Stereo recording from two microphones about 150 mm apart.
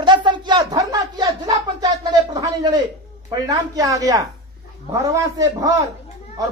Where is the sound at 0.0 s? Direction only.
30° right (ahead or behind).